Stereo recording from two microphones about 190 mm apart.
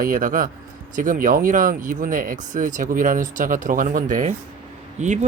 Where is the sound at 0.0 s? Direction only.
45° right (ahead or behind).